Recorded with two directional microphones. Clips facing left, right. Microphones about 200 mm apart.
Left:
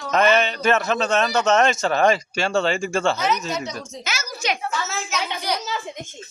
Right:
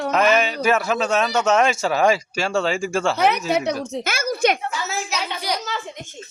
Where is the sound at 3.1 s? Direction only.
60° right (ahead or behind).